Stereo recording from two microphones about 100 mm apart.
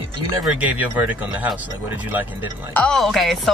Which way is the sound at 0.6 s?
15° right (ahead or behind).